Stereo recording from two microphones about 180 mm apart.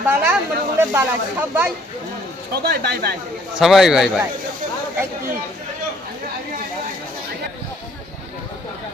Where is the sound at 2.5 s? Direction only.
60° right (ahead or behind).